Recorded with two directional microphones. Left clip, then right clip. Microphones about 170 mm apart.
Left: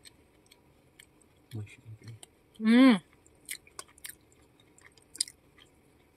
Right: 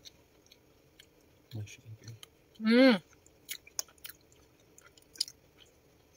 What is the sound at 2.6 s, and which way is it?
Speech, 20° left (ahead or behind).